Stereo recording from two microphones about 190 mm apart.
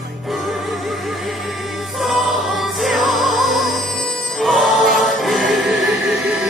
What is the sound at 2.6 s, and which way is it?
Music, centre (ahead or behind).